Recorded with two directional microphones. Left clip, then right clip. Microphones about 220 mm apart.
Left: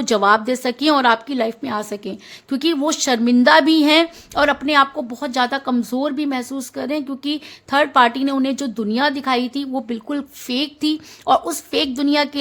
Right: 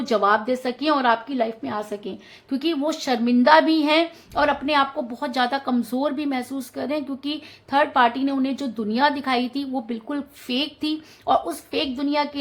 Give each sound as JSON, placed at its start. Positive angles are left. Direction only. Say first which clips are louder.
{"t": 0.0, "sound": "a woman's voice", "louder": "left 4 dB", "side_deg": 40}